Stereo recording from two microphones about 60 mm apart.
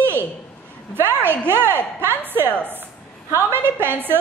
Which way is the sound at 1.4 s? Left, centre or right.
Right.